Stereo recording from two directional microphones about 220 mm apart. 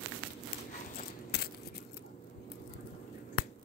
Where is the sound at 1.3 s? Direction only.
50° left (ahead or behind).